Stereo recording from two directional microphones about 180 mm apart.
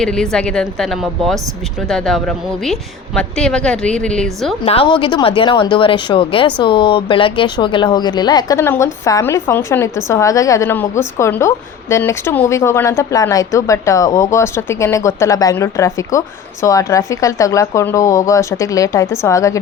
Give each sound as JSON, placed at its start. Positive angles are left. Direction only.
{"t": 0.0, "sound": "a woman's voice", "side_deg": 5}
{"t": 4.6, "sound": "speech", "side_deg": 30}